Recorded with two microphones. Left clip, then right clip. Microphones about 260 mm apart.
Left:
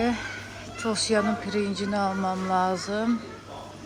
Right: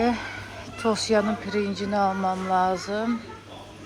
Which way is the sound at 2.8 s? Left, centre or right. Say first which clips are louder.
Right 1 dB; centre.